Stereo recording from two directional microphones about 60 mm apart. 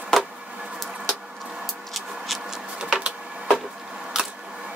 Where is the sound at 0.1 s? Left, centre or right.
Centre.